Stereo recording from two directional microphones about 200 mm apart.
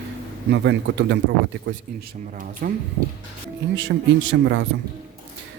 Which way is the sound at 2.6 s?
45° right (ahead or behind).